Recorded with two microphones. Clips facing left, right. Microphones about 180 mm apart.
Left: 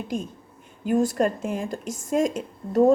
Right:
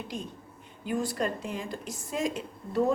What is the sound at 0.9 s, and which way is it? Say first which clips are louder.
A woman's voice: left 8 dB; 45° left (ahead or behind).